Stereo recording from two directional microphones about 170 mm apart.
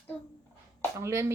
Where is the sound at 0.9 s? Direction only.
15° right (ahead or behind).